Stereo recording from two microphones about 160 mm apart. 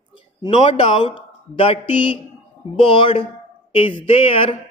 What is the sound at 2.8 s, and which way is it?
Speech, 35° left (ahead or behind).